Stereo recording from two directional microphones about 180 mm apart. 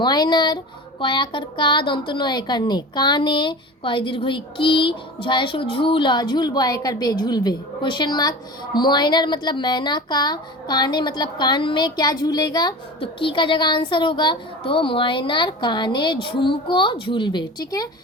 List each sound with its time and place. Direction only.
0.0 s speech: 25° left (ahead or behind)